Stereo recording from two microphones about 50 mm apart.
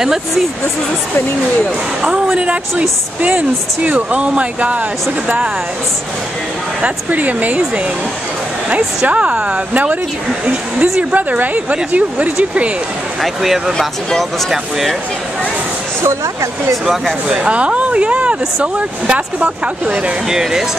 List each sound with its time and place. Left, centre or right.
0.0 s speech: centre
2.3 s speech: right
6.8 s speech: right
13.2 s speech: centre
16.0 s speech: right
16.8 s speech: centre
17.4 s speech: right
20.2 s speech: centre